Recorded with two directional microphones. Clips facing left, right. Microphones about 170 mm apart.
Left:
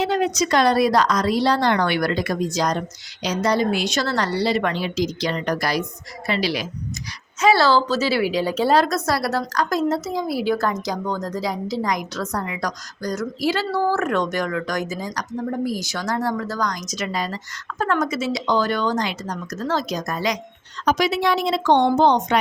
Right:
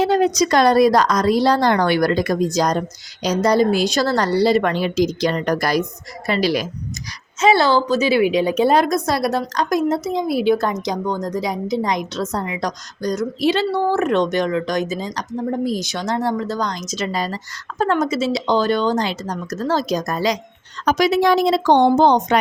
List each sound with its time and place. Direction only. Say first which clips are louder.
0.0 s a sound: right 5 dB; 40° right (ahead or behind)
0.3 s a woman's voice: right 3 dB; 40° right (ahead or behind)
7.4 s a woman's voice: right 2 dB; 20° right (ahead or behind); by 22.4 s 40° right (ahead or behind)